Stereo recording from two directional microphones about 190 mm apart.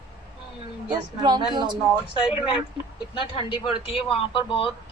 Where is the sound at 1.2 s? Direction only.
20° right (ahead or behind).